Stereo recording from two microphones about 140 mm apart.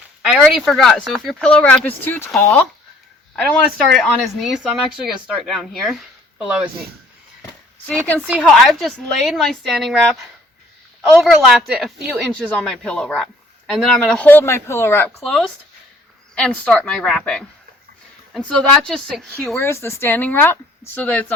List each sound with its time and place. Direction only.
0.3 s speech: centre (ahead or behind)
3.3 s speech: 5° left (ahead or behind)
7.9 s speech: 10° left (ahead or behind)
12.3 s speech: 10° left (ahead or behind)
15.2 s speech: centre (ahead or behind)
16.5 s speech: 5° left (ahead or behind)
18.4 s speech: 5° left (ahead or behind)
19.5 s speech: 20° left (ahead or behind)